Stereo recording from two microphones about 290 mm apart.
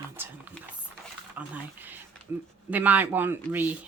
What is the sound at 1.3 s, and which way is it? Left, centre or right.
Speech, centre.